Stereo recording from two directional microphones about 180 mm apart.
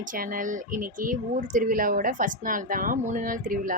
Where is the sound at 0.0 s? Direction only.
50° right (ahead or behind).